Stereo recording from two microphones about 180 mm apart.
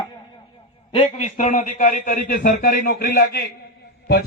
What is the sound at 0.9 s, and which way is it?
A man's voice, 35° left (ahead or behind).